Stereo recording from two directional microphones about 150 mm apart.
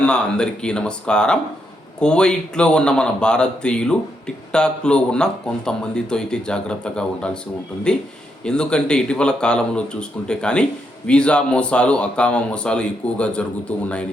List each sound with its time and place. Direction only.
0.0 s speech: 5° left (ahead or behind)